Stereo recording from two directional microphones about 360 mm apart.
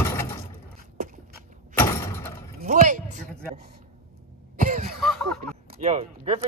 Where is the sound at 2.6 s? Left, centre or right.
Right.